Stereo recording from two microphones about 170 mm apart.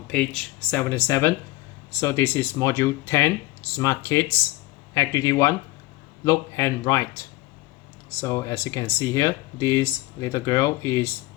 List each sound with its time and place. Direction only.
0.1 s speech: 5° left (ahead or behind)
8.2 s speech: 20° left (ahead or behind)